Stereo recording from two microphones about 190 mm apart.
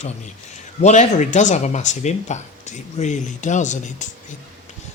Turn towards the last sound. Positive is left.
turn(degrees=40)  # may be behind; listen again after turning